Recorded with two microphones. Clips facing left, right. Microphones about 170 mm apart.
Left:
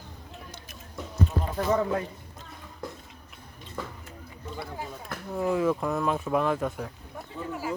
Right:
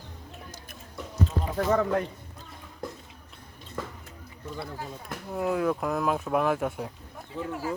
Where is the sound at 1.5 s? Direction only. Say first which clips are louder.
Right 1 dB; 55° right (ahead or behind).